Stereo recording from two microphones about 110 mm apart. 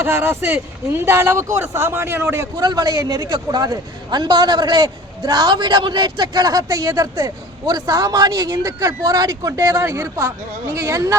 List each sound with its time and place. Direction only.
0.0 s speech: 20° right (ahead or behind)
2.6 s a man's voice: 40° right (ahead or behind)